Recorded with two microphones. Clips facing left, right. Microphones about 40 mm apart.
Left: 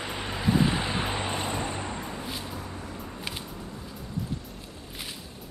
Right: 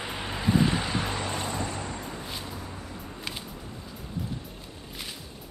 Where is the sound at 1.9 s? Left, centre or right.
Centre.